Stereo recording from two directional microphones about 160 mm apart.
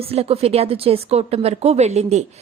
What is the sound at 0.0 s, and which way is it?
A woman's voice, 40° right (ahead or behind).